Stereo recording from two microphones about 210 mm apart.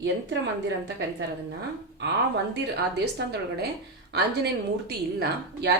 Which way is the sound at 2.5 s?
50° right (ahead or behind).